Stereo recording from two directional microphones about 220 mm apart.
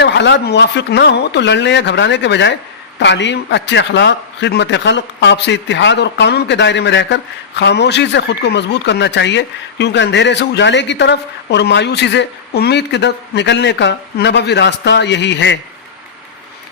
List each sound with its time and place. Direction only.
0.0 s a man's voice: 50° left (ahead or behind)